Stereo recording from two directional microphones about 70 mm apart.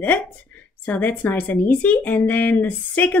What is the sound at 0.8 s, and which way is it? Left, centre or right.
Speech, left.